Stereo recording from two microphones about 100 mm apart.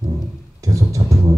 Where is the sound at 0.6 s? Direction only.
35° right (ahead or behind).